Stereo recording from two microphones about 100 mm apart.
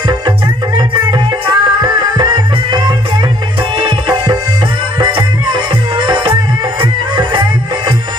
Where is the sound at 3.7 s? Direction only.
55° right (ahead or behind).